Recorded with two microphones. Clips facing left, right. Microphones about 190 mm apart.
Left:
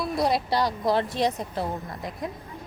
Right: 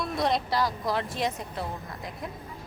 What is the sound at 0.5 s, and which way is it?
A woman's voice, 25° left (ahead or behind).